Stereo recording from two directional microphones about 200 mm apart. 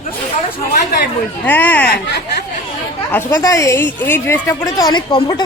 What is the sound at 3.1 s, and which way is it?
A woman's voice, 15° left (ahead or behind).